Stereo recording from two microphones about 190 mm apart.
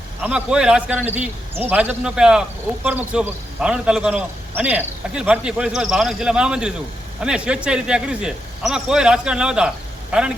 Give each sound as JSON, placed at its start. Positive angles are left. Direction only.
{"t": 0.2, "sound": "a man's voice", "side_deg": -5}